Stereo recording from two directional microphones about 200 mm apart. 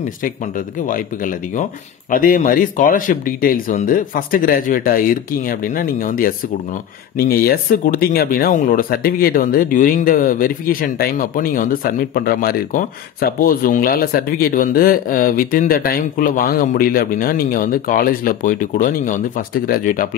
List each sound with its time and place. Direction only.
0.8 s speech: 40° left (ahead or behind)